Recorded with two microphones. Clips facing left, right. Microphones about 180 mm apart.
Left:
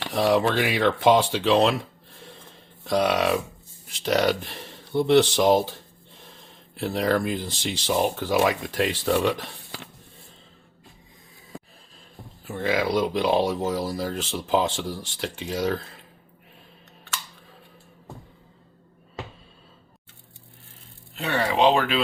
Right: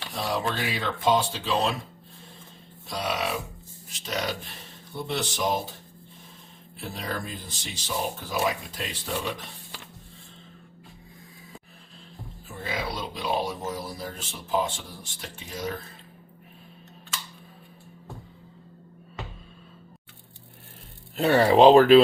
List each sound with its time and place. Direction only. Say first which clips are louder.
0.0 s speech: left 8 dB; 80° left
2.9 s speech: left 8 dB; 70° left (ahead or behind)
6.7 s speech: left 11 dB; 75° left (ahead or behind)
12.5 s speech: left 9 dB; 80° left
21.2 s speech: right 5 dB; 35° right (ahead or behind)